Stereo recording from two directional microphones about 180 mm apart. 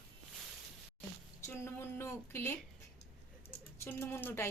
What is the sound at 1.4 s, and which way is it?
Speech, 15° left (ahead or behind).